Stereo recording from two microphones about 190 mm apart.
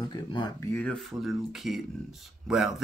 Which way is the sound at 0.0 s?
25° left (ahead or behind).